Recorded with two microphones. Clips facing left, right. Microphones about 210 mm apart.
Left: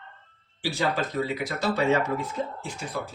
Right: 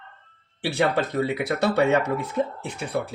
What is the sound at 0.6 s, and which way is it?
Speech, 65° right (ahead or behind).